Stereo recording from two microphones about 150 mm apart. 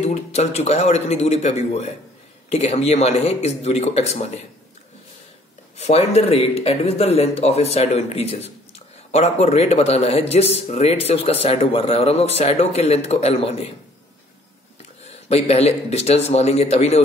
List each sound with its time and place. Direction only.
0.0 s a man's voice: 45° left (ahead or behind)
5.8 s a man's voice: 45° left (ahead or behind)
14.8 s speech: 45° left (ahead or behind)